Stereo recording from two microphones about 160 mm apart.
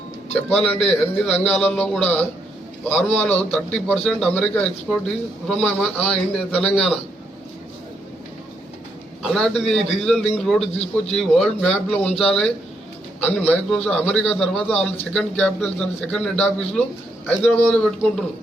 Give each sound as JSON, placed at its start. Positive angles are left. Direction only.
{"t": 0.5, "sound": "a man's voice", "side_deg": 0}
{"t": 9.2, "sound": "a man's voice", "side_deg": 5}
{"t": 10.8, "sound": "a man's voice", "side_deg": 40}
{"t": 11.2, "sound": "a man's voice", "side_deg": 5}